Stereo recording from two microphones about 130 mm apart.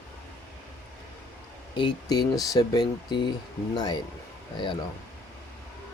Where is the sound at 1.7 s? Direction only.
35° left (ahead or behind).